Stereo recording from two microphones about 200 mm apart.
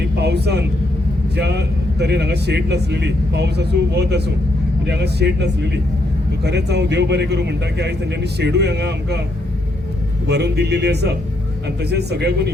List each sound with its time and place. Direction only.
0.2 s a man's voice: 55° right (ahead or behind)
10.2 s a man's voice: 55° right (ahead or behind)